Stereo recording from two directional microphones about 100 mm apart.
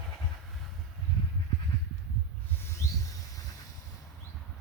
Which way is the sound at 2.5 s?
25° left (ahead or behind).